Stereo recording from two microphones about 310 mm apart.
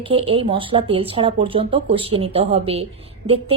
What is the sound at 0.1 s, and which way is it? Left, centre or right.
Speech, centre.